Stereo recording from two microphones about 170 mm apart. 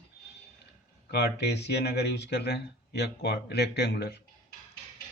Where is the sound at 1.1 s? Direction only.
70° left (ahead or behind).